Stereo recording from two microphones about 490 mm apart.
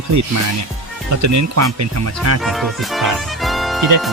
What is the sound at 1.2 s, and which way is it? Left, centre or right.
Speech, right.